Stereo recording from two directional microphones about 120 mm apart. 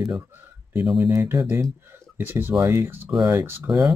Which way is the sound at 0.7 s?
5° right (ahead or behind).